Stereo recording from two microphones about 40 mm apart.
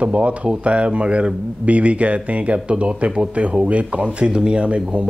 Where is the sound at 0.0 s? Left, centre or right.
Right.